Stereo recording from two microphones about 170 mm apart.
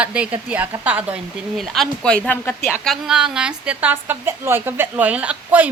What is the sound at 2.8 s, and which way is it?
A woman's voice, centre (ahead or behind).